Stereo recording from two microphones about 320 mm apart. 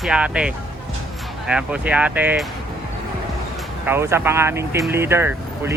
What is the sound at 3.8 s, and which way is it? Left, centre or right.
Speech, centre.